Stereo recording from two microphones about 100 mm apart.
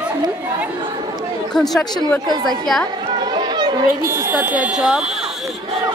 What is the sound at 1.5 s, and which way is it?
Speech, 5° left (ahead or behind).